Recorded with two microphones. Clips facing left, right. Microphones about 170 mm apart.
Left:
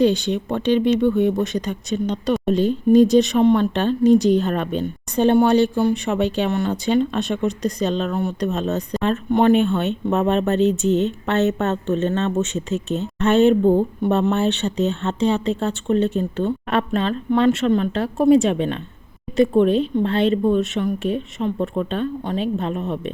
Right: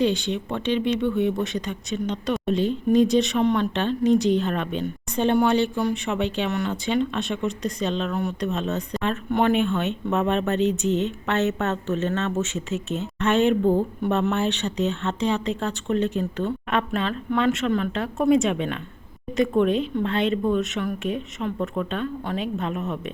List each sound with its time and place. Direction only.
0.0 s speech: 40° left (ahead or behind)